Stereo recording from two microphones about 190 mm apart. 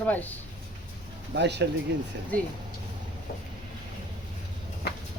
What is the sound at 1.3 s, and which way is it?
Speech, 65° right (ahead or behind).